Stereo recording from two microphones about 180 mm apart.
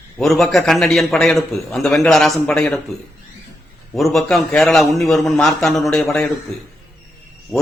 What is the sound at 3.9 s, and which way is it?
A man's voice, centre (ahead or behind).